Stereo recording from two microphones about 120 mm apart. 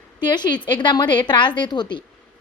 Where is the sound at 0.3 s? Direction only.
35° left (ahead or behind).